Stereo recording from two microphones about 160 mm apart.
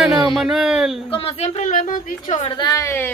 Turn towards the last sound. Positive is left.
turn(degrees=15)  # may be behind; listen again after turning